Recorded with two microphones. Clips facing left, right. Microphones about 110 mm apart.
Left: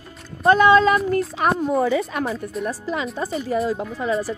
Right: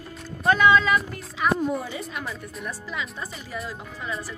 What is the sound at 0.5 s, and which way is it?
Speech, 35° left (ahead or behind).